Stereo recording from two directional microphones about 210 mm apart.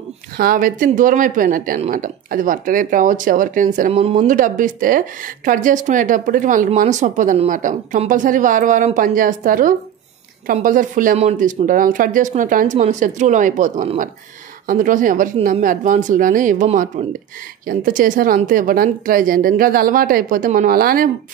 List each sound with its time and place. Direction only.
0.4 s speech: 40° right (ahead or behind)